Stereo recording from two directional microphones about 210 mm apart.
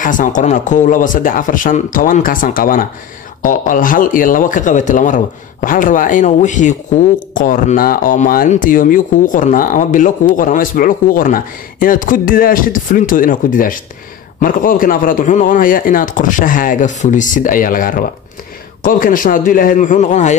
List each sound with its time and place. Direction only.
0.0 s speech: 40° left (ahead or behind)